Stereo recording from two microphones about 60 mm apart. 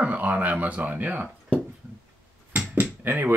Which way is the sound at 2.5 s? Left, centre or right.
Right.